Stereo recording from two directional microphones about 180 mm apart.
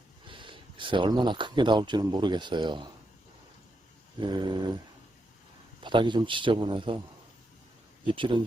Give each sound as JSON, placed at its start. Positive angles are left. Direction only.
{"t": 0.3, "sound": "speech", "side_deg": -30}
{"t": 4.2, "sound": "a man's voice", "side_deg": -25}
{"t": 5.8, "sound": "a man's voice", "side_deg": -25}
{"t": 8.0, "sound": "a man's voice", "side_deg": -30}